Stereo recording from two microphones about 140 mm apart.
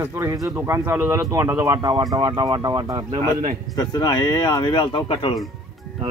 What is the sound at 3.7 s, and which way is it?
A man's voice, 30° left (ahead or behind).